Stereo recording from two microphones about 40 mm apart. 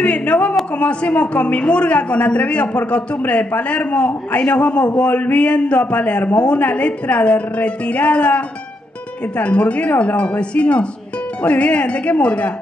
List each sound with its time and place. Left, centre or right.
0.0 s a man's voice: left
9.4 s a man's voice: left